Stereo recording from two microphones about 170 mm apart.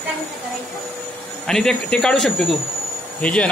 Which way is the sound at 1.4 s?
5° left (ahead or behind).